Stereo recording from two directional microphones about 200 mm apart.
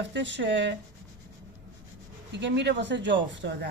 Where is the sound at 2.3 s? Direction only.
60° right (ahead or behind).